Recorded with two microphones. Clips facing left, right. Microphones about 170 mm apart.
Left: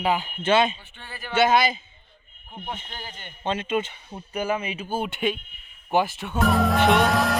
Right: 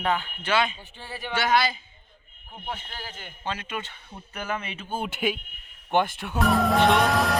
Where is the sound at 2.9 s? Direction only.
5° right (ahead or behind).